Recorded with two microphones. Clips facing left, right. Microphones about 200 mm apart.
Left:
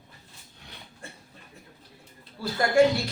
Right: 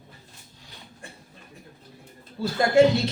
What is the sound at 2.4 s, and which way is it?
Speech, 25° right (ahead or behind).